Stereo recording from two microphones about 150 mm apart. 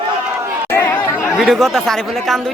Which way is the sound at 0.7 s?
15° left (ahead or behind).